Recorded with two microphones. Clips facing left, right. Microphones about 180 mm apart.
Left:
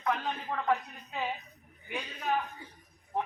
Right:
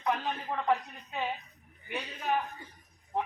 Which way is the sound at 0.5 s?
10° right (ahead or behind).